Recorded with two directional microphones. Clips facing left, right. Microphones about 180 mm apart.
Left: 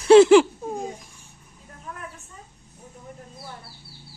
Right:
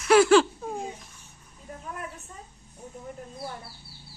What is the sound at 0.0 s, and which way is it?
Laughter, 25° left (ahead or behind).